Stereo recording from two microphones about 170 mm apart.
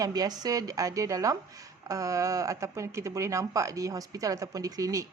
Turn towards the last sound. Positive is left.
turn(degrees=-20)  # may be behind; listen again after turning